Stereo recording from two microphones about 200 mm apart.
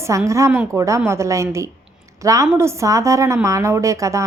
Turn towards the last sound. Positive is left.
turn(degrees=-15)  # may be behind; listen again after turning